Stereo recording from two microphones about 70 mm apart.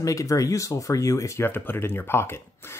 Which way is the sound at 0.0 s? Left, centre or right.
Left.